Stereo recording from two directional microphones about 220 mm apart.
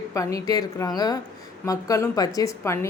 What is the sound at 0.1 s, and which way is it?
A woman's voice, 15° left (ahead or behind).